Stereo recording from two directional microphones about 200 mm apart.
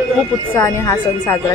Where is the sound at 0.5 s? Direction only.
15° left (ahead or behind).